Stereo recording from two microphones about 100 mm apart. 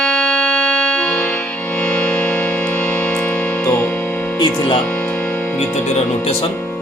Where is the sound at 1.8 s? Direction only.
20° left (ahead or behind).